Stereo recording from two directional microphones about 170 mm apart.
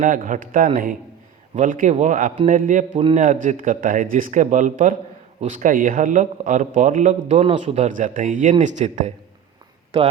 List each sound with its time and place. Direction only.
0.0 s a man's voice: 50° right (ahead or behind)